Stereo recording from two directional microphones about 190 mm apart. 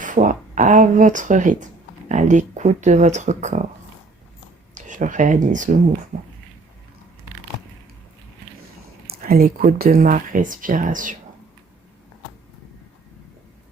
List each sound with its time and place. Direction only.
0.0 s speech: 45° right (ahead or behind)
4.7 s speech: 40° right (ahead or behind)
9.0 s speech: 50° right (ahead or behind)